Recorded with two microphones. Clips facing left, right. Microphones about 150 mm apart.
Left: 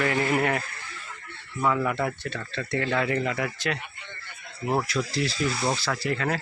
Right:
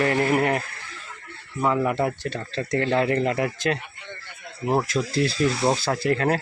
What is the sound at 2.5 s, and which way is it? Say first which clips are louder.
Speech: right 4 dB; 40° right (ahead or behind).